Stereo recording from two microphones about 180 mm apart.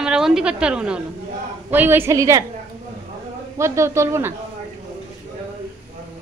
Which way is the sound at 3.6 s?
15° right (ahead or behind).